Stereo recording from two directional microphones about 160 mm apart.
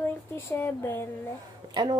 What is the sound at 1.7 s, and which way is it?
Speech, 25° right (ahead or behind).